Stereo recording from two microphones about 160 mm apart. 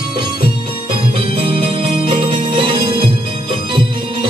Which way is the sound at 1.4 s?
35° right (ahead or behind).